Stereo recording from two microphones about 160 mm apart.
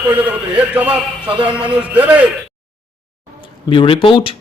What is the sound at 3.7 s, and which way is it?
Speech, 30° left (ahead or behind).